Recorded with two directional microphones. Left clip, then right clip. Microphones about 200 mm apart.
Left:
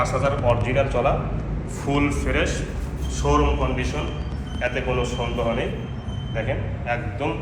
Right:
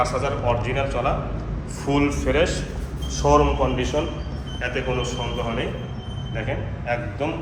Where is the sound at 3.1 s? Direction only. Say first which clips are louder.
Right 4 dB; 25° right (ahead or behind).